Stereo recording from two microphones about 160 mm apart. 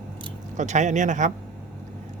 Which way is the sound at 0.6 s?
50° right (ahead or behind).